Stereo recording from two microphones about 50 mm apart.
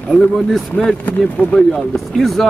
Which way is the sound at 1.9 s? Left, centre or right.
Centre.